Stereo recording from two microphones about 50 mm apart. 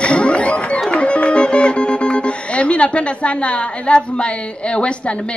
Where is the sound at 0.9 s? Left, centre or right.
Left.